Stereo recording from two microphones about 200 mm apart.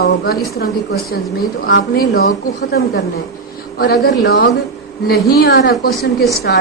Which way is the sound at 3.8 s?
50° left (ahead or behind).